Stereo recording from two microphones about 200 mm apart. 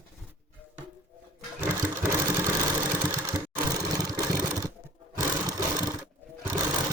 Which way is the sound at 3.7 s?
20° right (ahead or behind).